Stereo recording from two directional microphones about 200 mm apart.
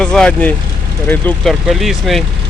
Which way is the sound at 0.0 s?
5° left (ahead or behind).